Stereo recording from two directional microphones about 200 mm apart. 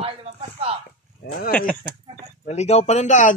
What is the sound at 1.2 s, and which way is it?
Speech, 55° left (ahead or behind).